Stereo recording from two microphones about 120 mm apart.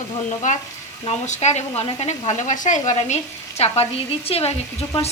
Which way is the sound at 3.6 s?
60° left (ahead or behind).